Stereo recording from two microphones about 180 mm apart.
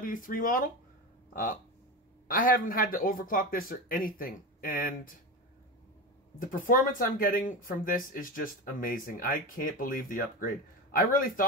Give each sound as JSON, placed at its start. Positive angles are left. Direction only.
{"t": 0.0, "sound": "speech", "side_deg": 50}
{"t": 6.4, "sound": "speech", "side_deg": 50}